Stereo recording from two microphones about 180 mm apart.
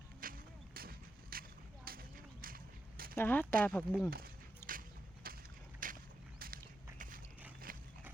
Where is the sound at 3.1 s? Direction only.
10° left (ahead or behind).